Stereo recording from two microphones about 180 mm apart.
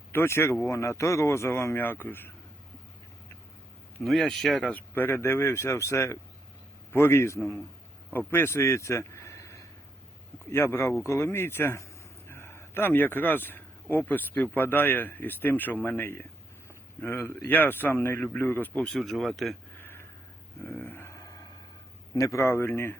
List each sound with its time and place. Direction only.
0.1 s a man's voice: 15° left (ahead or behind)
4.0 s a man's voice: centre (ahead or behind)
20.7 s a sound: 10° left (ahead or behind)
22.1 s a man's voice: 20° left (ahead or behind)